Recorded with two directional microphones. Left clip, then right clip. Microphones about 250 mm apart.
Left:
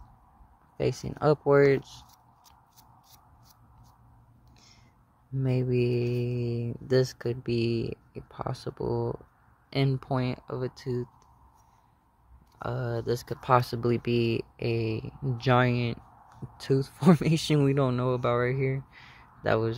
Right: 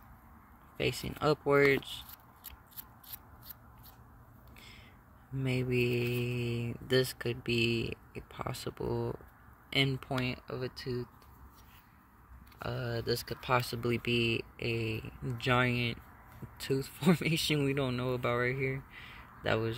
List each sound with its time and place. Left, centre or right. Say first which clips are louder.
0.7 s speech: left 4 dB; centre
5.6 s mantra: left 4 dB; left
5.9 s speech: left 4 dB; centre
6.2 s mantra: left 4 dB; left
6.6 s speech: left 4 dB; centre
12.5 s speech: left 5 dB; centre